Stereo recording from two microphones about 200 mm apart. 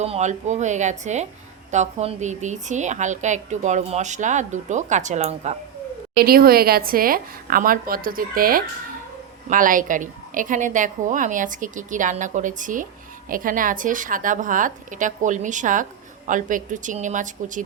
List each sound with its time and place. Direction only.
0.0 s a woman's voice: 35° right (ahead or behind)
6.2 s a woman's voice: 50° right (ahead or behind)